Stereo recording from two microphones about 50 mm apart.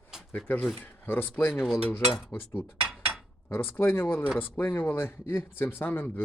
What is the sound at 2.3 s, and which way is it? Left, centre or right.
Speech, centre.